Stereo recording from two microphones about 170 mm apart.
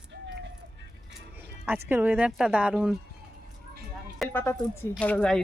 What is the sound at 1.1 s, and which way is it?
Music, 10° right (ahead or behind).